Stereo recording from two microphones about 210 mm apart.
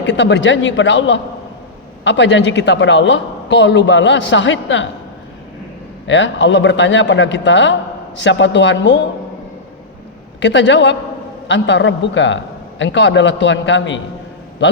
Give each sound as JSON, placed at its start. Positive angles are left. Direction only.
{"t": 0.0, "sound": "a woman's voice", "side_deg": 60}
{"t": 6.1, "sound": "a woman's voice", "side_deg": 60}
{"t": 10.4, "sound": "a woman's voice", "side_deg": 60}